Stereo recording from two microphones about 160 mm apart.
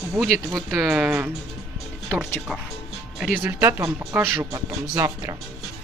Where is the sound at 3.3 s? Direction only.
15° right (ahead or behind).